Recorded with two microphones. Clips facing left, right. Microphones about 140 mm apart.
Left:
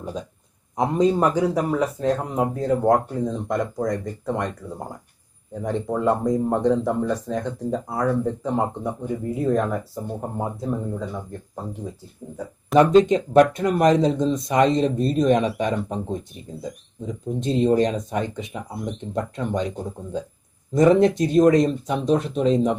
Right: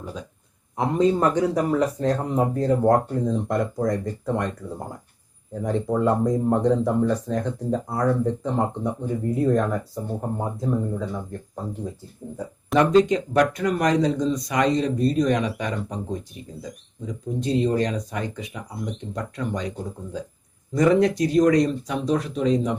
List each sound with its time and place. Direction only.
0.8 s a man's voice: 10° left (ahead or behind)
5.6 s speech: centre (ahead or behind)
12.7 s speech: 20° left (ahead or behind)